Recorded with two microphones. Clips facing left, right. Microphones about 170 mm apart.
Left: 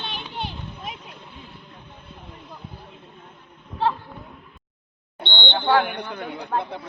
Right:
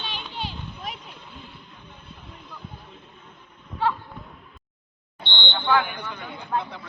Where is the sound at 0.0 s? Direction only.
55° left (ahead or behind).